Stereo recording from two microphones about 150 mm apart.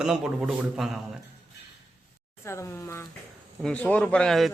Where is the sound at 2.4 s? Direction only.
20° left (ahead or behind); by 4.5 s centre (ahead or behind).